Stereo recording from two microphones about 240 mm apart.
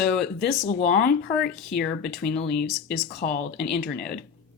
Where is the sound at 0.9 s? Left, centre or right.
Left.